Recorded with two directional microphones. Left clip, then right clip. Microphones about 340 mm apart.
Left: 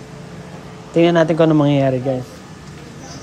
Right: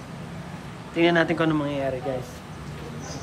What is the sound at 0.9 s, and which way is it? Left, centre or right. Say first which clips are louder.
Speech: left 8 dB; centre.